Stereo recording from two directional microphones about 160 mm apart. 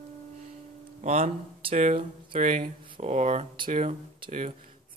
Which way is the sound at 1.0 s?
45° right (ahead or behind).